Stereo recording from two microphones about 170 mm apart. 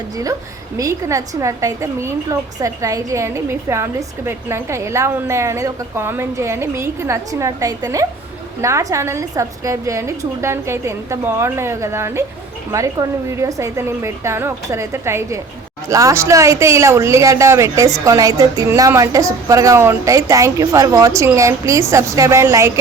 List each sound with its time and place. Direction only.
0.8 s speech: 20° right (ahead or behind)